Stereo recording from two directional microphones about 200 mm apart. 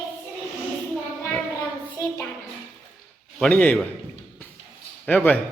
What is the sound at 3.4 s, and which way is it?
Speech, 5° left (ahead or behind).